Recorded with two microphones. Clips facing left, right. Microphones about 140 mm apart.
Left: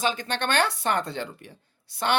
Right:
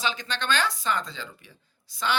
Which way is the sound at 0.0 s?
50° left (ahead or behind).